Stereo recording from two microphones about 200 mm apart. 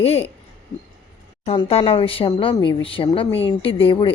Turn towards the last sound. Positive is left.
turn(degrees=25)  # may be behind; listen again after turning